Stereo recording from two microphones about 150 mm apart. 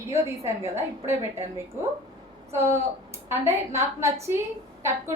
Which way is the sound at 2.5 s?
20° right (ahead or behind).